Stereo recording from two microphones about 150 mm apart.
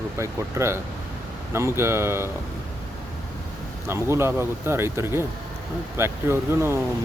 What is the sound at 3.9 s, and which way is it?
Speech, 15° right (ahead or behind).